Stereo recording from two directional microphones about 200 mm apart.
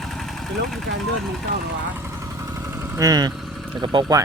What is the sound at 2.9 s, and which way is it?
Speech, 20° right (ahead or behind).